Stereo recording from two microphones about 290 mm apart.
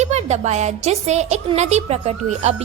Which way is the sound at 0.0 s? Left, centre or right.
Right.